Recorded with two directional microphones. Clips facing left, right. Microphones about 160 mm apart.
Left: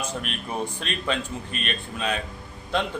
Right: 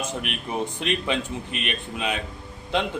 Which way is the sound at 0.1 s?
15° right (ahead or behind).